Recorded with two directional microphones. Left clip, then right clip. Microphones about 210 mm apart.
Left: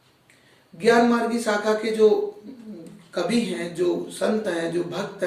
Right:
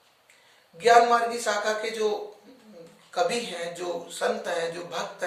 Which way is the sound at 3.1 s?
15° right (ahead or behind).